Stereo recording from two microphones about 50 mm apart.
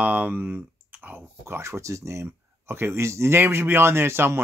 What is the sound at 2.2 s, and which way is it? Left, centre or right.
Speech, right.